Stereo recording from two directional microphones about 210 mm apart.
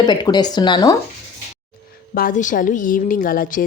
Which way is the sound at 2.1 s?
40° left (ahead or behind).